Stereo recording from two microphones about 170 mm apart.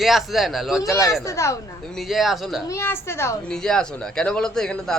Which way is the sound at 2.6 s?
15° left (ahead or behind).